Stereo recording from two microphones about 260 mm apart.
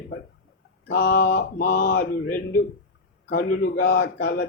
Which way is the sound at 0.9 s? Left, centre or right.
Left.